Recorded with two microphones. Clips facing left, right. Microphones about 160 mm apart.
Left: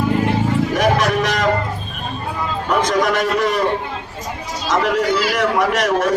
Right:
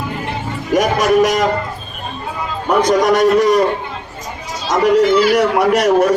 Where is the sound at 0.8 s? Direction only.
45° right (ahead or behind).